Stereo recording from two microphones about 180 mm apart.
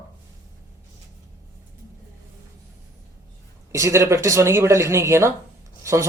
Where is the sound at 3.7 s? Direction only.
15° right (ahead or behind).